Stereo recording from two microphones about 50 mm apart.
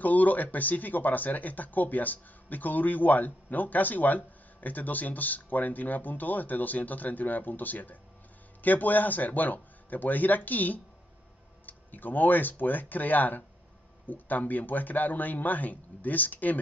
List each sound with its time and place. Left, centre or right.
0.0 s speech: left